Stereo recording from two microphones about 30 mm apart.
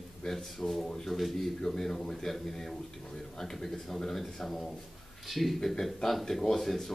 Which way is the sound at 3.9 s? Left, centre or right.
Centre.